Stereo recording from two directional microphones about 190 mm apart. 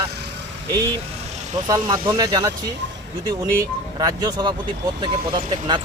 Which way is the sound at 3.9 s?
20° right (ahead or behind).